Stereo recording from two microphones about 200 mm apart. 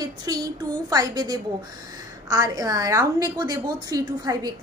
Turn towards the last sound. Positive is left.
turn(degrees=-20)  # may be behind; listen again after turning